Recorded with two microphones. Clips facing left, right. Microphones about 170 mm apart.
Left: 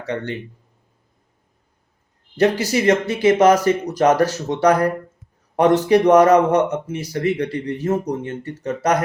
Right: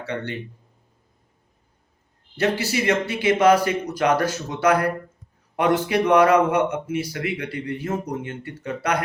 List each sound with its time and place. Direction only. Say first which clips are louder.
0.0 s speech: left 4 dB; 45° left (ahead or behind)
2.4 s speech: left 5 dB; 45° left (ahead or behind)